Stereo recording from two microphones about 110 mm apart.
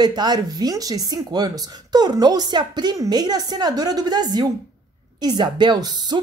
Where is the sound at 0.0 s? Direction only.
40° right (ahead or behind).